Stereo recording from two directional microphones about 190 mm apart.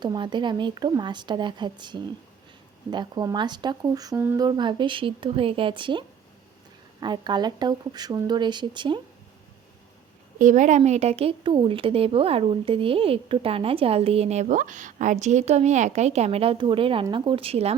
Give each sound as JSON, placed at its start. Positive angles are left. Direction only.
{"t": 0.0, "sound": "speech", "side_deg": -25}
{"t": 4.4, "sound": "speech", "side_deg": -25}
{"t": 10.3, "sound": "a woman's voice", "side_deg": -40}